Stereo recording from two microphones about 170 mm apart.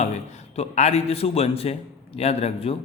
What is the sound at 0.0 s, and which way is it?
A man's voice, 40° left (ahead or behind).